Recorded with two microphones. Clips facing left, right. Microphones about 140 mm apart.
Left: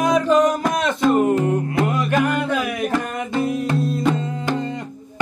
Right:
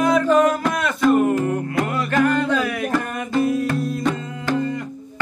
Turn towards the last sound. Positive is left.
turn(degrees=25)  # may be behind; listen again after turning